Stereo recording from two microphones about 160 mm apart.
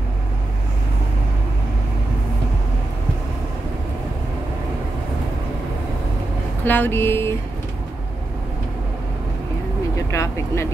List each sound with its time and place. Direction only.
6.6 s speech: 10° left (ahead or behind)
10.1 s vehicle: 20° left (ahead or behind)